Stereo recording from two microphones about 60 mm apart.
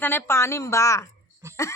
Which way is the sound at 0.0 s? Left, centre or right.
Left.